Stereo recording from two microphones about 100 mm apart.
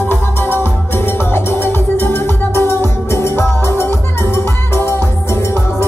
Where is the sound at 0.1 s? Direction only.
20° left (ahead or behind).